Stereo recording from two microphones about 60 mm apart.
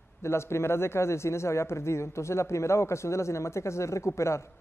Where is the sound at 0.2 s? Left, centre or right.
Left.